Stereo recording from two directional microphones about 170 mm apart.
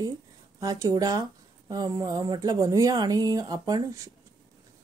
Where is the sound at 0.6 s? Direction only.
20° right (ahead or behind).